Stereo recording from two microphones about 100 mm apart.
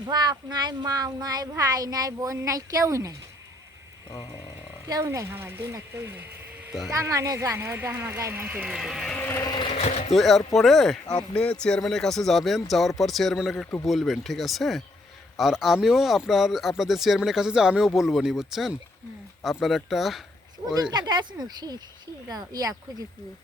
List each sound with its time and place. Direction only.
0.0 s speech: 45° right (ahead or behind)
4.9 s speech: 35° right (ahead or behind)
8.6 s speech: 5° right (ahead or behind)
9.1 s vehicle: 20° left (ahead or behind)
9.6 s sewing machine: 90° left
10.1 s speech: centre (ahead or behind)
20.9 s speech: 45° right (ahead or behind)